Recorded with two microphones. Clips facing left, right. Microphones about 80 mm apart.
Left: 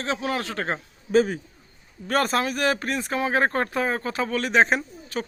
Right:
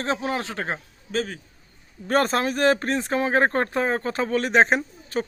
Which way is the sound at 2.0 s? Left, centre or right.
Right.